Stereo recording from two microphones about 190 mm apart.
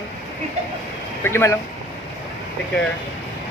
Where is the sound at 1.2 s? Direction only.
15° left (ahead or behind).